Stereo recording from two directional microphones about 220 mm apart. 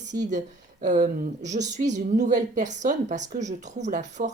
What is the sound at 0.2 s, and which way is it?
A woman's voice, 35° right (ahead or behind).